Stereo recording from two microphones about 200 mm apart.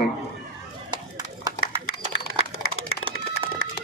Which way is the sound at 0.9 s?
20° right (ahead or behind).